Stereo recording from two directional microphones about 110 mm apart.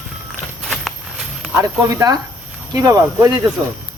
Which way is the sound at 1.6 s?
30° right (ahead or behind).